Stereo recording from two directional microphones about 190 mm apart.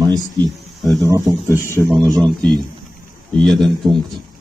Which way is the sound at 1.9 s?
Centre (ahead or behind).